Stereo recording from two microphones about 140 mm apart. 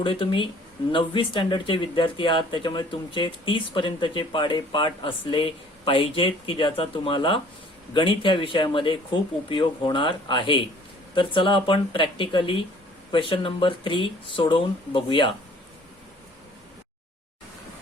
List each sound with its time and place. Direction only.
0.0 s speech: 40° left (ahead or behind)